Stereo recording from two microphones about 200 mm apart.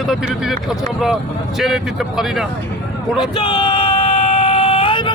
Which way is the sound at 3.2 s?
20° left (ahead or behind).